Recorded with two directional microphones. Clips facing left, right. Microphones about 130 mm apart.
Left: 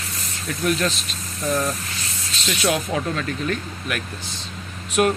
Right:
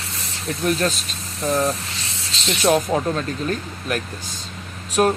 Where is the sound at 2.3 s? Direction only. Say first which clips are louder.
Right 3 dB; 25° right (ahead or behind).